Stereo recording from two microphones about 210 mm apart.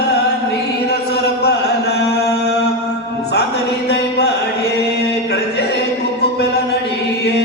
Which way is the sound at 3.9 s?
50° left (ahead or behind).